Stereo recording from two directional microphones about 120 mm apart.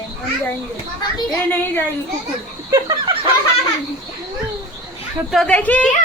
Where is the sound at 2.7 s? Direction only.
35° right (ahead or behind).